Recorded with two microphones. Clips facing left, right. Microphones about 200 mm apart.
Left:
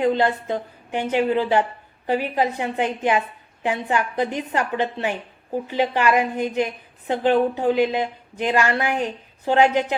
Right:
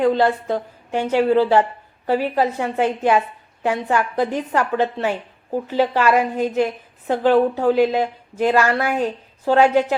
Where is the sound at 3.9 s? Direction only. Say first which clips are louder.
Right 2 dB; 40° right (ahead or behind).